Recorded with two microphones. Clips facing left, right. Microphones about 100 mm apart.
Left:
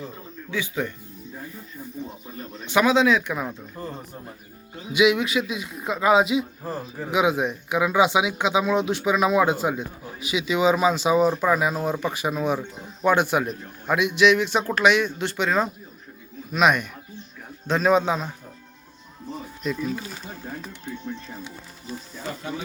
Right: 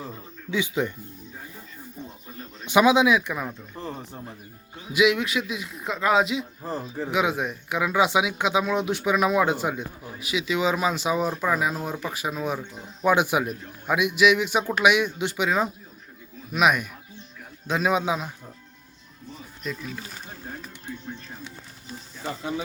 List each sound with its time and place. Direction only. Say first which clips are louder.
0.5 s speech: right 2 dB; 20° right (ahead or behind)
2.6 s a man's voice: right 1 dB; 15° right (ahead or behind); by 3.5 s centre (ahead or behind)
4.9 s a man's voice: left 2 dB; centre (ahead or behind)
19.6 s speech: left 5 dB; centre (ahead or behind)